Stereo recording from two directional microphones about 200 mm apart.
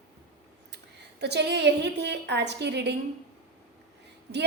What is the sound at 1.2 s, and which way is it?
A woman's voice, 55° right (ahead or behind).